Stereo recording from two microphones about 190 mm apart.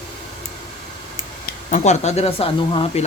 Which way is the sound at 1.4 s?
40° left (ahead or behind).